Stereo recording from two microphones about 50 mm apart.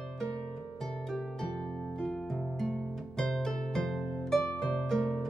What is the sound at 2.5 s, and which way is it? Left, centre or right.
Music, centre.